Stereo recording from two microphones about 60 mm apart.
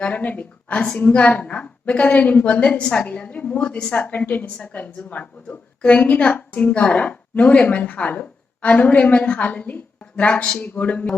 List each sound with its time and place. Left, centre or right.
0.0 s a woman's voice: left